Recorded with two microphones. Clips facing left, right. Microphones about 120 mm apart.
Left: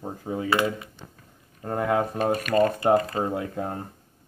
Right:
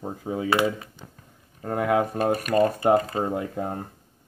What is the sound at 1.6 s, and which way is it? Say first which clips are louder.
Speech: right 1 dB; 5° right (ahead or behind).